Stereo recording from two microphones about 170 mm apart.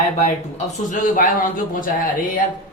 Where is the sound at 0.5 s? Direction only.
50° left (ahead or behind).